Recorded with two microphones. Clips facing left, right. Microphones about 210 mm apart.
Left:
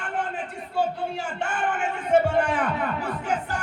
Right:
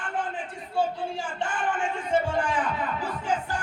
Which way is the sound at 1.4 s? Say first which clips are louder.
Left 1 dB; 65° left (ahead or behind).